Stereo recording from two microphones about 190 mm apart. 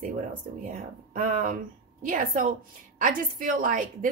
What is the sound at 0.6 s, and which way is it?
A woman's voice, 45° right (ahead or behind).